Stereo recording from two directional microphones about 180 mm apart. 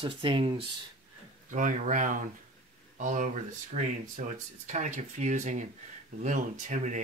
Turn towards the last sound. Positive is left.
turn(degrees=-45)  # may be behind; listen again after turning